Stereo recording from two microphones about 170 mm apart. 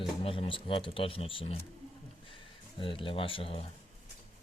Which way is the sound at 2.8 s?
30° left (ahead or behind).